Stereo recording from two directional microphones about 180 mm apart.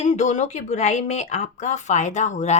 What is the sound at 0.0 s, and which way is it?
Speech, 40° left (ahead or behind).